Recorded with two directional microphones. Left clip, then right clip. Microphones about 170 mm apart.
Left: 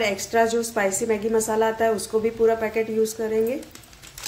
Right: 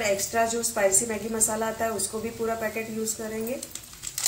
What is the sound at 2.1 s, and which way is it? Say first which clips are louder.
Speech: left 10 dB; 45° left (ahead or behind).